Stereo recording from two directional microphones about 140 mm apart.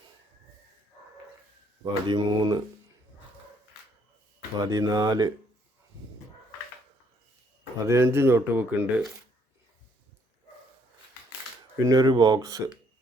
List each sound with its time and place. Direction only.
1.8 s speech: 35° right (ahead or behind)
4.6 s speech: 25° right (ahead or behind)
7.9 s speech: 20° right (ahead or behind)
11.9 s speech: 30° right (ahead or behind)